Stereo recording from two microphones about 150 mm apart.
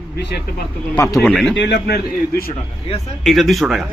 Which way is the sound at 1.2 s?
5° left (ahead or behind).